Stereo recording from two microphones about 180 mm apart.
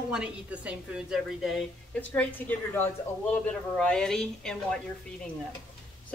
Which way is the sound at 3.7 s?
5° left (ahead or behind).